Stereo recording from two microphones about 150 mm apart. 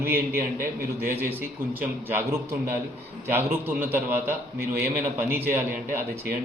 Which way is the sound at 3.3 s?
15° right (ahead or behind).